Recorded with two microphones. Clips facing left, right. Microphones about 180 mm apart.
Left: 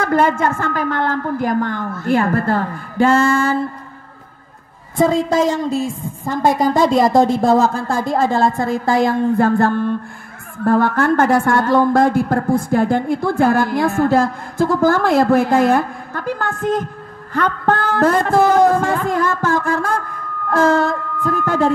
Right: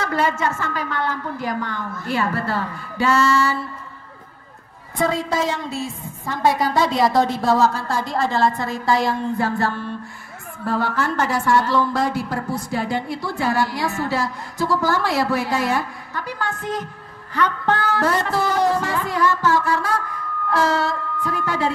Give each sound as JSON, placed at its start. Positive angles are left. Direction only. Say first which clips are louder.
{"t": 0.0, "sound": "a woman's voice", "louder": "left 6 dB", "side_deg": 50}
{"t": 4.9, "sound": "a woman's voice", "louder": "left 6 dB", "side_deg": 45}